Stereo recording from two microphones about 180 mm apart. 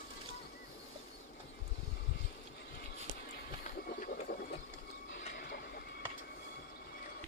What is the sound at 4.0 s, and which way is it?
Vehicle, 45° left (ahead or behind).